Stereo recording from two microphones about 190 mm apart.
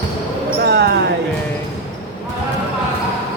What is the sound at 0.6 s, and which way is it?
Basketball bounce, 60° right (ahead or behind).